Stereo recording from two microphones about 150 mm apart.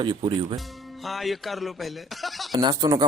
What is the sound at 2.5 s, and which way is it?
Speech, 30° right (ahead or behind).